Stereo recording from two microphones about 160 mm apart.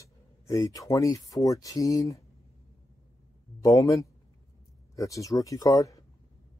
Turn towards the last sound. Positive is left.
turn(degrees=20)  # may be behind; listen again after turning